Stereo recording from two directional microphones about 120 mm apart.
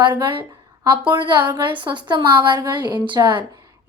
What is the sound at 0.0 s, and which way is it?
A woman's voice, 35° right (ahead or behind).